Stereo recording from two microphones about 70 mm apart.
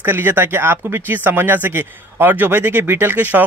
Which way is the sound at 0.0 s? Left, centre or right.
Right.